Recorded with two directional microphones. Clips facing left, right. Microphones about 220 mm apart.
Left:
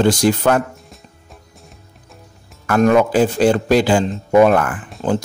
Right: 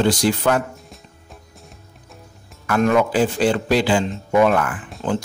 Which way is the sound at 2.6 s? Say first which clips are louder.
Left 4 dB; 40° left (ahead or behind).